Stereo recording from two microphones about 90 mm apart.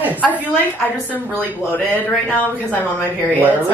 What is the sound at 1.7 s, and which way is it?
Speech, 20° left (ahead or behind).